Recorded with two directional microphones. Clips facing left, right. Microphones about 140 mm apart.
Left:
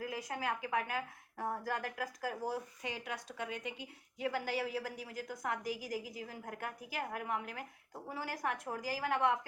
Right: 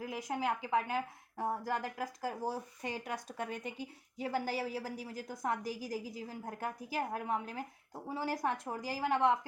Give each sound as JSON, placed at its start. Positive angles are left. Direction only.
{"t": 0.0, "sound": "a woman's voice", "side_deg": -20}
{"t": 2.8, "sound": "a woman's voice", "side_deg": -40}